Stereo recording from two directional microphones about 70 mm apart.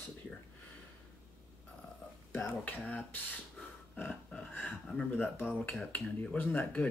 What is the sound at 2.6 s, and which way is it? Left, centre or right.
Speech, left.